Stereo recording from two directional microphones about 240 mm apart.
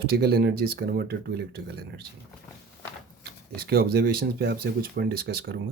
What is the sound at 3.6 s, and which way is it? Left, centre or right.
Speech, right.